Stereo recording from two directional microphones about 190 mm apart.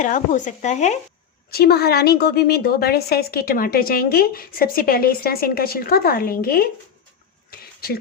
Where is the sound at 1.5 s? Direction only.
55° left (ahead or behind).